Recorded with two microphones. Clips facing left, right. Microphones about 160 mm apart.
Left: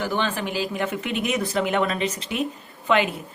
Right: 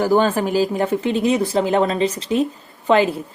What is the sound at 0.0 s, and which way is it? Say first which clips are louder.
Speech: right 9 dB; 40° right (ahead or behind).